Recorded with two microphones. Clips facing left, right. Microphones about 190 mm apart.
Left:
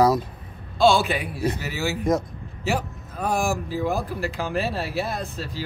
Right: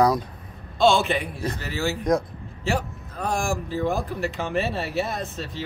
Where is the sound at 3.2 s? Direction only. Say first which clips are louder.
Left 2 dB; 5° left (ahead or behind).